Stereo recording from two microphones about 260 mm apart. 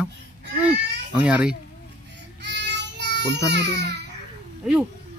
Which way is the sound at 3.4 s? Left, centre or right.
Right.